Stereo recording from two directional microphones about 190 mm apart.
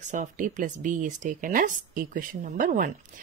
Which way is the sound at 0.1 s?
40° right (ahead or behind).